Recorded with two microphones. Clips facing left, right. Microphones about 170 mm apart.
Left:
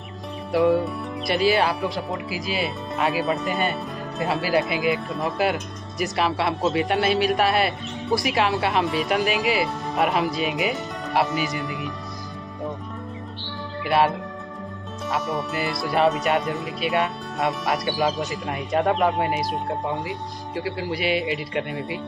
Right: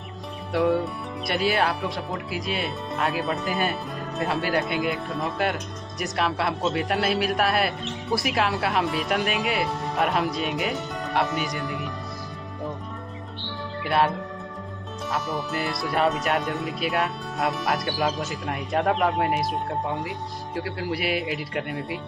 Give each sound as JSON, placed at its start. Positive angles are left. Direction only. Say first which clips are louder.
{"t": 0.5, "sound": "speech", "louder": "left 3 dB", "side_deg": 0}
{"t": 13.8, "sound": "speech", "louder": "left 2 dB", "side_deg": 0}